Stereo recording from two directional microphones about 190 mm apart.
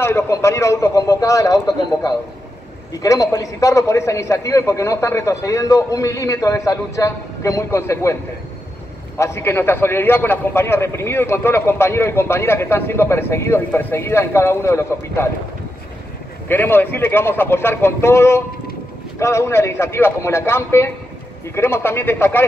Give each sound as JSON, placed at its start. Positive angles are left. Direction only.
{"t": 0.0, "sound": "a man's voice", "side_deg": 15}
{"t": 9.2, "sound": "a man's voice", "side_deg": 15}
{"t": 16.4, "sound": "a man's voice", "side_deg": 10}